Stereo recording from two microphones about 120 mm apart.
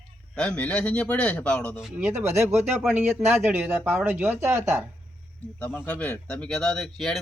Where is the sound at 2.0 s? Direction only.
20° right (ahead or behind).